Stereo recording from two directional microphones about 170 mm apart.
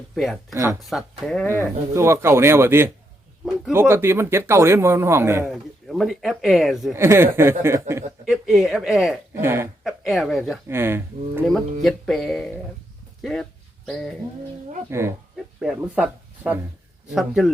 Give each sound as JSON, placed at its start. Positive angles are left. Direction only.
{"t": 0.5, "sound": "speech", "side_deg": -20}
{"t": 1.2, "sound": "speech", "side_deg": 5}
{"t": 1.6, "sound": "speech", "side_deg": -15}
{"t": 5.5, "sound": "speech", "side_deg": 0}
{"t": 6.9, "sound": "speech", "side_deg": -15}
{"t": 8.3, "sound": "speech", "side_deg": 0}
{"t": 9.3, "sound": "speech", "side_deg": -15}
{"t": 9.8, "sound": "speech", "side_deg": 0}
{"t": 10.7, "sound": "speech", "side_deg": -15}
{"t": 11.4, "sound": "speech", "side_deg": 0}
{"t": 13.2, "sound": "a sound", "side_deg": 5}
{"t": 14.8, "sound": "speech", "side_deg": -15}